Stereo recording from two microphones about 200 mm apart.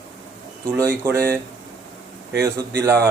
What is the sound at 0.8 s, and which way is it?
Speech, 15° right (ahead or behind).